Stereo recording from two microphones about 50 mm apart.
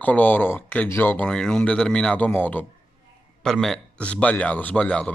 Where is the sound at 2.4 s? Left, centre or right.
Left.